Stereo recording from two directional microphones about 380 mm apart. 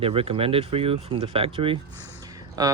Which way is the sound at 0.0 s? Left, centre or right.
Centre.